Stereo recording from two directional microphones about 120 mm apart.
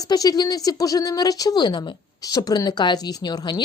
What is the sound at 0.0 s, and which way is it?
A woman's voice, 30° left (ahead or behind).